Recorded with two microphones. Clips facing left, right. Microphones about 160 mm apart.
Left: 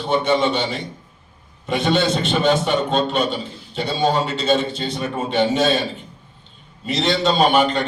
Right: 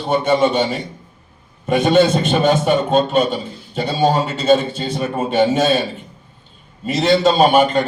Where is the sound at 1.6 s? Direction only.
50° right (ahead or behind).